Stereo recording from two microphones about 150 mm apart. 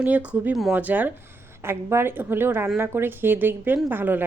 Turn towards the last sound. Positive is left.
turn(degrees=-10)  # may be behind; listen again after turning